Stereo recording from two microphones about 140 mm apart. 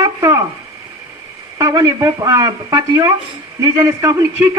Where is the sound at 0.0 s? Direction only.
20° right (ahead or behind).